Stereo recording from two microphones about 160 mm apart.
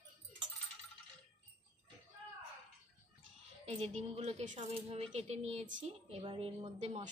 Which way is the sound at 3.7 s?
40° right (ahead or behind).